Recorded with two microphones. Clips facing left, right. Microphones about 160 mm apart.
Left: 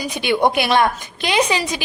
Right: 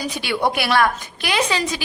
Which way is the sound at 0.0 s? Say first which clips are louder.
Left 4 dB; 20° left (ahead or behind).